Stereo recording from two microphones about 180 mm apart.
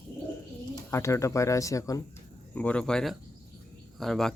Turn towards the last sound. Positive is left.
turn(degrees=0)  # may be behind; listen again after turning